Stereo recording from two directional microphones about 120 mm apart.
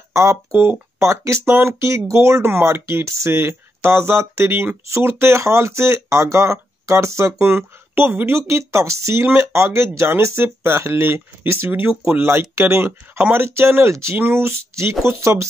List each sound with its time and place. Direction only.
0.1 s speech: 25° right (ahead or behind)